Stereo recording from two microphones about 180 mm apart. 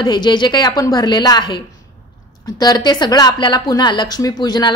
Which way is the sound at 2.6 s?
25° left (ahead or behind).